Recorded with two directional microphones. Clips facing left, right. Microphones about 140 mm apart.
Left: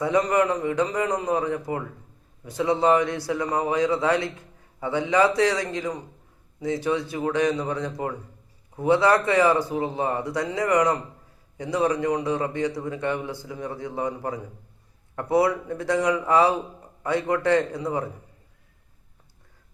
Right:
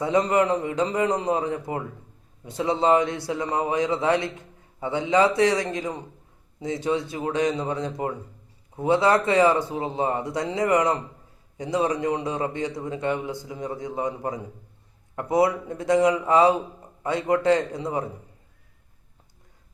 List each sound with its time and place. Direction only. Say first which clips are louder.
0.0 s a man's voice: even; 25° right (ahead or behind)